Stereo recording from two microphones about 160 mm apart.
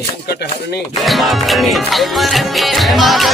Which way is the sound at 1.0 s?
Centre (ahead or behind).